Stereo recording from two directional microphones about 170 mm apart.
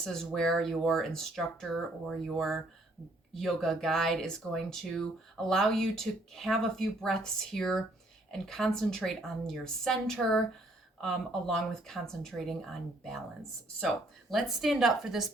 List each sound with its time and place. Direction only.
0.0 s speech: centre (ahead or behind)